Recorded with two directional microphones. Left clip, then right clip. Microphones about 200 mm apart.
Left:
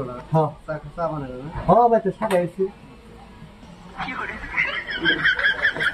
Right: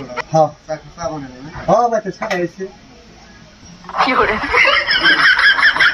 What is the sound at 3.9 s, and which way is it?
Snicker, 50° right (ahead or behind).